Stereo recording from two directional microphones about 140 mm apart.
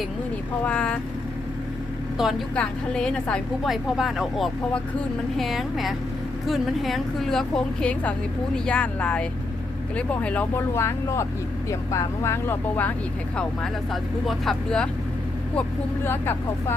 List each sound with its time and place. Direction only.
0.6 s speech: 10° left (ahead or behind)
2.2 s a woman's voice: 5° right (ahead or behind)
16.0 s speech: 15° left (ahead or behind)